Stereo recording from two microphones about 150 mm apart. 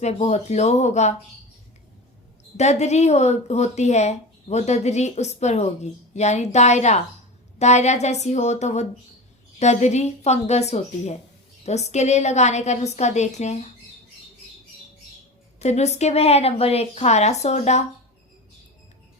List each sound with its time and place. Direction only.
0.0 s a woman's voice: 45° left (ahead or behind)
2.6 s a woman's voice: 50° left (ahead or behind)
15.5 s a woman's voice: 50° left (ahead or behind)